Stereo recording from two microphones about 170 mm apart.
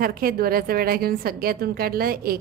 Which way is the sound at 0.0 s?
60° right (ahead or behind).